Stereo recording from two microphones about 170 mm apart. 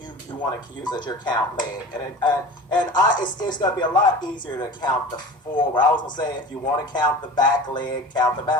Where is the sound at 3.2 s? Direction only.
25° left (ahead or behind).